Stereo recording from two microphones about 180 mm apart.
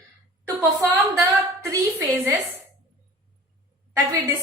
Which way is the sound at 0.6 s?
15° right (ahead or behind).